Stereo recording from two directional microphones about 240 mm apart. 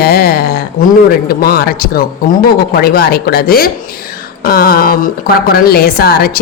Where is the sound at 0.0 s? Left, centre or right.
Left.